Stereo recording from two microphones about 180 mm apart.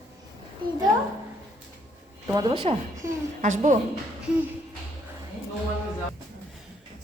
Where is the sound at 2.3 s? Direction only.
25° right (ahead or behind).